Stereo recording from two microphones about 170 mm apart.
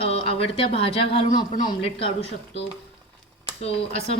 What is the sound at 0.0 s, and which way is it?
Speech, 35° left (ahead or behind).